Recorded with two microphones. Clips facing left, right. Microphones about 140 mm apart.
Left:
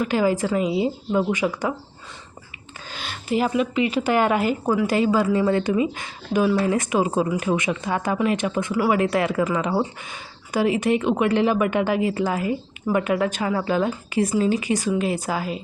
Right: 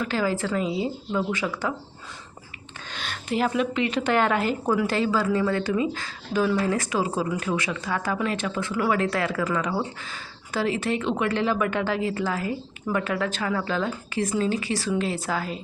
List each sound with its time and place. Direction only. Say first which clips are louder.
0.0 s speech: left 5 dB; 15° left (ahead or behind)
2.9 s speech: left 4 dB; 5° left (ahead or behind)